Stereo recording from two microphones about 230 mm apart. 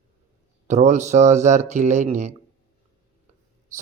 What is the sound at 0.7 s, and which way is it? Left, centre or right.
Speech, right.